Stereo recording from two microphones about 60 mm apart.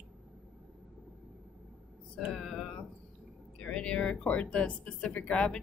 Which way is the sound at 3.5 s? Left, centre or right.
Centre.